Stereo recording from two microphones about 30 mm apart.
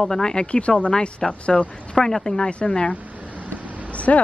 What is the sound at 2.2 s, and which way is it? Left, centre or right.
Speech, left.